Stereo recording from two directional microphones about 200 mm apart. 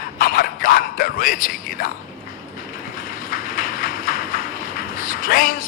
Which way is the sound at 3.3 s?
45° left (ahead or behind).